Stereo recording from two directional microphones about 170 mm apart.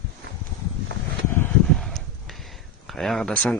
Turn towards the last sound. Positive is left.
turn(degrees=5)  # may be behind; listen again after turning